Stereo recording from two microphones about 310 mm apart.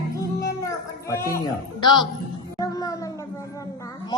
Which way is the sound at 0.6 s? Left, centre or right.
Centre.